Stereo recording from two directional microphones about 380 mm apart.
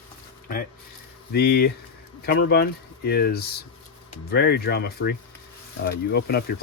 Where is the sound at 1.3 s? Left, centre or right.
Left.